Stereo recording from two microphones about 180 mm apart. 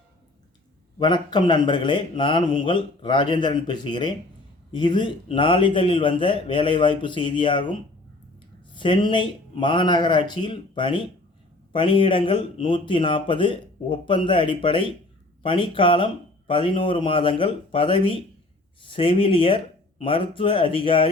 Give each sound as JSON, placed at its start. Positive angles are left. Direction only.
{"t": 0.9, "sound": "speech", "side_deg": 25}